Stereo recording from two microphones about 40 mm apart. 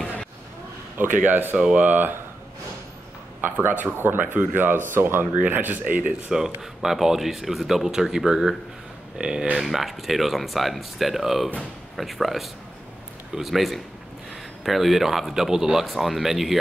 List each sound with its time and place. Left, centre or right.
0.9 s speech: right
3.6 s speech: right
4.2 s speech: right
5.2 s speech: right
6.3 s speech: centre
9.6 s speech: centre
15.8 s speech: centre